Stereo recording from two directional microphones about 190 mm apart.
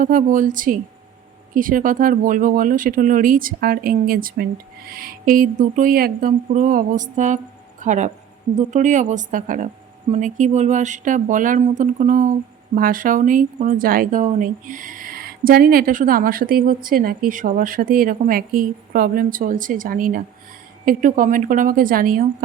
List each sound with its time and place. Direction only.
0.0 s speech: 45° right (ahead or behind)